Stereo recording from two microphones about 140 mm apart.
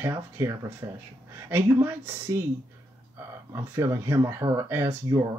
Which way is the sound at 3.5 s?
20° right (ahead or behind).